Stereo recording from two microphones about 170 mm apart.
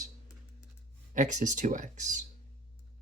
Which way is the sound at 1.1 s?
45° right (ahead or behind).